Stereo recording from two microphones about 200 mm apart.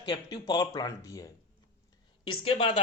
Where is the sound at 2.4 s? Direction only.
30° left (ahead or behind).